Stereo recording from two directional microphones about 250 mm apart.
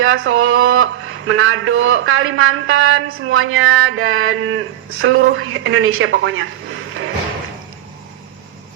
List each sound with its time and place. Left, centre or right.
0.0 s speech: right